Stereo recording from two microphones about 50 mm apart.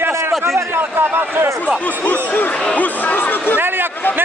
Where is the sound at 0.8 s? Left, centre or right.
Right.